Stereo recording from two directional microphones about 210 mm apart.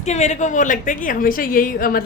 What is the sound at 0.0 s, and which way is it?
A woman's voice, 35° left (ahead or behind).